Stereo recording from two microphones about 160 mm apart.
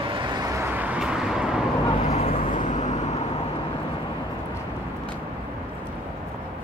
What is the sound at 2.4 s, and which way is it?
Vehicle, 55° left (ahead or behind).